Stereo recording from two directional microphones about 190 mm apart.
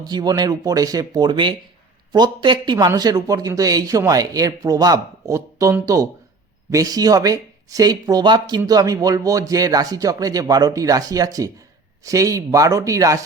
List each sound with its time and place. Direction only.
0.0 s speech: 20° right (ahead or behind)